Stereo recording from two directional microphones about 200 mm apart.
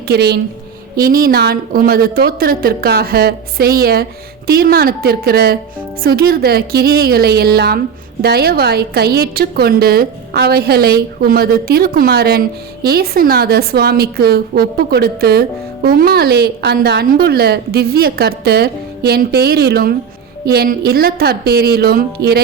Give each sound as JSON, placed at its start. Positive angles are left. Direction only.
{"t": 0.1, "sound": "a woman's voice", "side_deg": -55}